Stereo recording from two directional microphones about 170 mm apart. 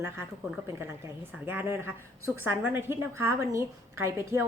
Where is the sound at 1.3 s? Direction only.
10° right (ahead or behind).